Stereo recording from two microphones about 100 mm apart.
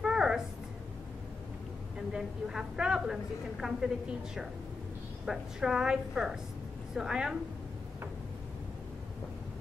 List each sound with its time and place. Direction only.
0.0 s a sound: 5° right (ahead or behind)
2.0 s a woman's voice: 5° right (ahead or behind)
5.2 s a woman's voice: 5° right (ahead or behind)